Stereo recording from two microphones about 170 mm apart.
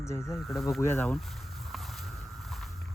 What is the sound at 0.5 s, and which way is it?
Speech, centre (ahead or behind).